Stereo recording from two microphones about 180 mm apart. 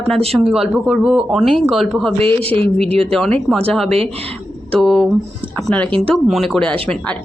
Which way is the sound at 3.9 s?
35° right (ahead or behind).